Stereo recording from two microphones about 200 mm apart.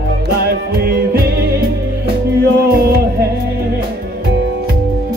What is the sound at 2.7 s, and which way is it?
Music, 50° right (ahead or behind).